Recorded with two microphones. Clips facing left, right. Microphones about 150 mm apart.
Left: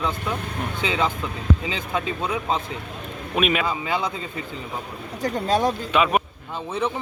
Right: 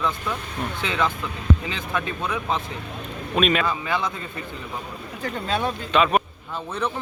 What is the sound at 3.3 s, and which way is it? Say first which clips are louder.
Speech: right 1 dB; 10° left (ahead or behind).